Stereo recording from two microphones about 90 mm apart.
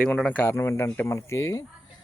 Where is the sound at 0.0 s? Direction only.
15° left (ahead or behind).